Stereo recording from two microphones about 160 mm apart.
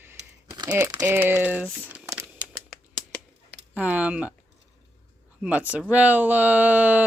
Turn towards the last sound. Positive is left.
turn(degrees=-10)  # may be behind; listen again after turning